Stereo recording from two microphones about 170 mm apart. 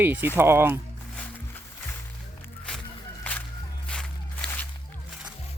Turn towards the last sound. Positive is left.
turn(degrees=10)  # may be behind; listen again after turning